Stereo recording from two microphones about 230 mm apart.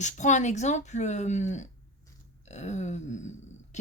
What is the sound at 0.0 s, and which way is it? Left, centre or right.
A woman's voice, left.